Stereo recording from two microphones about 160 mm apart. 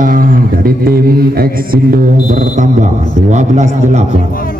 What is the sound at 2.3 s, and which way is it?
Speech, 50° right (ahead or behind).